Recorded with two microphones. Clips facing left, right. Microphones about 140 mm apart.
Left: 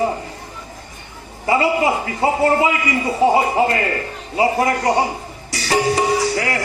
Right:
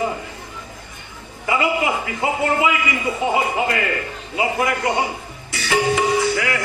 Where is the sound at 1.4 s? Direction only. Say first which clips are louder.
Left 3 dB; 35° left (ahead or behind).